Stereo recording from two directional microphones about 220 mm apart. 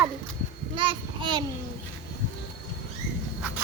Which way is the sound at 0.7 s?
25° right (ahead or behind).